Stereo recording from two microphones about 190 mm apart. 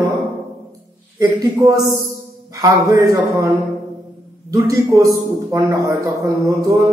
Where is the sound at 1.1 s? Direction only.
15° right (ahead or behind).